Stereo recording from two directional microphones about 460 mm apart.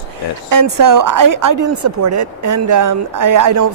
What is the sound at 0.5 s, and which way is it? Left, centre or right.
A woman's voice, right.